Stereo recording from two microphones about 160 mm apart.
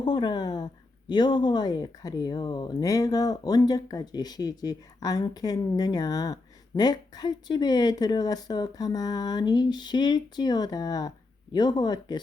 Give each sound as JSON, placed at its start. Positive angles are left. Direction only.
{"t": 0.0, "sound": "a woman's voice", "side_deg": 25}